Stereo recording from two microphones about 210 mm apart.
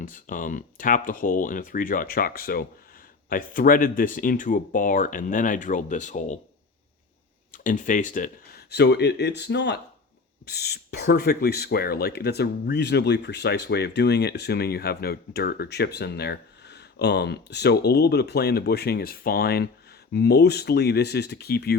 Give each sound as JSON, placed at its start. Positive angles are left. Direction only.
{"t": 0.0, "sound": "speech", "side_deg": 40}
{"t": 7.5, "sound": "speech", "side_deg": 40}